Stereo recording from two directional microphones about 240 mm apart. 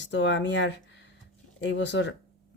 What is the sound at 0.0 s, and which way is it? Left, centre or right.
Speech, left.